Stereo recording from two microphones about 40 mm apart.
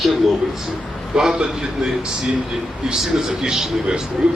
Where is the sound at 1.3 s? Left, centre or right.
Right.